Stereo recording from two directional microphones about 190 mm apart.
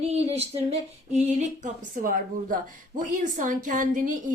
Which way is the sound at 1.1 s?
35° right (ahead or behind).